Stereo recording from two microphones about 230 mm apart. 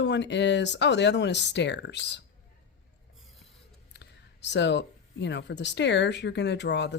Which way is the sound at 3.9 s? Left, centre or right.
Left.